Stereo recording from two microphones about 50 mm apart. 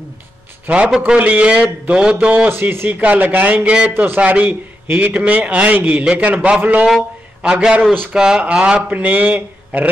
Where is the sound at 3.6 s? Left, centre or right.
Right.